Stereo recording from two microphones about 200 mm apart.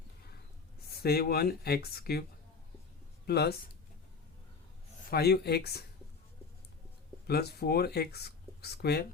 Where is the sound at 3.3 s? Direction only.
55° left (ahead or behind).